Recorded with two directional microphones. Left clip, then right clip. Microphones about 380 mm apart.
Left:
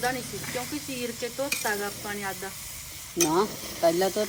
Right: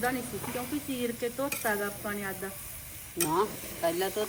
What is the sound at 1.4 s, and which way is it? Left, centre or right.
Speech, centre.